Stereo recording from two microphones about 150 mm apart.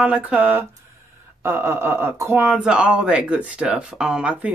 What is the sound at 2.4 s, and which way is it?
Speech, 5° right (ahead or behind).